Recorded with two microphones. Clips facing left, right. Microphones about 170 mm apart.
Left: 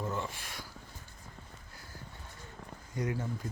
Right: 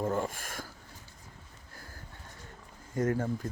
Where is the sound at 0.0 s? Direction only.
50° right (ahead or behind).